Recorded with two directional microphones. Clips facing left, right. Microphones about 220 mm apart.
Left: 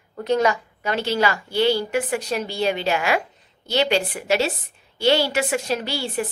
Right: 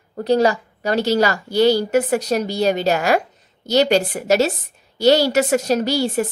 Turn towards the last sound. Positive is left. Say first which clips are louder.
# right 7 dB
turn(degrees=-40)  # may be behind; listen again after turning